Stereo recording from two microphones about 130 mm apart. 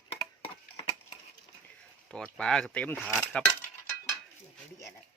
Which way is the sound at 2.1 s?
5° left (ahead or behind).